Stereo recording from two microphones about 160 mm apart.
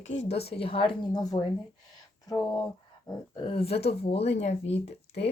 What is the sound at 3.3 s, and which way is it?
A woman's voice, 35° left (ahead or behind).